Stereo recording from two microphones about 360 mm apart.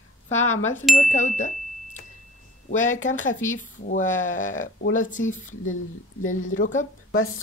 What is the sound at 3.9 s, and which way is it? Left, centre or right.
Speech, left.